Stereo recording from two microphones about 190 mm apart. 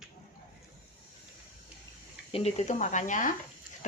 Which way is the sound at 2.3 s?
35° left (ahead or behind).